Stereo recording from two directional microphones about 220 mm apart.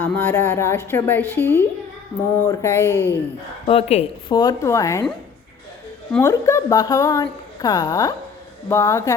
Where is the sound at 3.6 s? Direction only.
25° left (ahead or behind).